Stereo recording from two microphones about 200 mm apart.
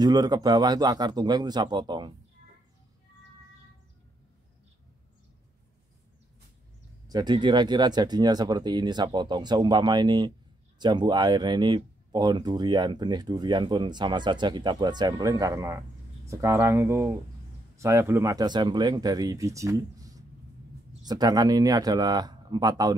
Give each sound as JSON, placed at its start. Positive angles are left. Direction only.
{"t": 0.0, "sound": "speech", "side_deg": -20}
{"t": 7.1, "sound": "speech", "side_deg": -20}